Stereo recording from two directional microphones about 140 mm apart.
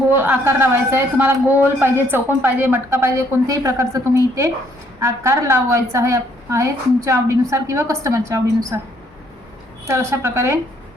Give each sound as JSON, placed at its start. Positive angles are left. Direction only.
{"t": 0.1, "sound": "a woman's voice", "side_deg": -15}
{"t": 9.8, "sound": "a woman's voice", "side_deg": -20}